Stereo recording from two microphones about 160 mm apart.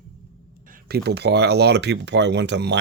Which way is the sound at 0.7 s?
80° right.